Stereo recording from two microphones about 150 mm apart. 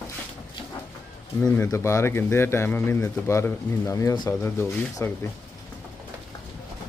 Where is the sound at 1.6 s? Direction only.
20° left (ahead or behind).